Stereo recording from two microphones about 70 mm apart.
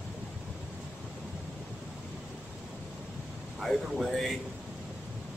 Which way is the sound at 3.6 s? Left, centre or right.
Centre.